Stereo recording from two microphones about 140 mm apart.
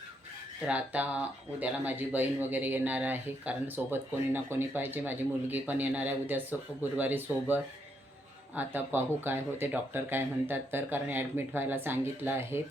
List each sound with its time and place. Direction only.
0.6 s speech: 10° right (ahead or behind)